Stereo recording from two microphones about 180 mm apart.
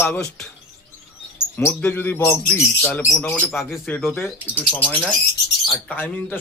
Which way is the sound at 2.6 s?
Centre (ahead or behind).